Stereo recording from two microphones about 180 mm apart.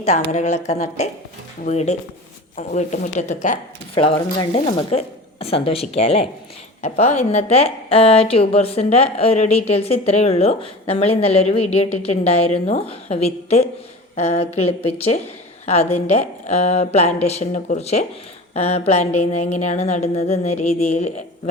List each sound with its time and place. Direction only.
0.0 s a woman's voice: 40° left (ahead or behind)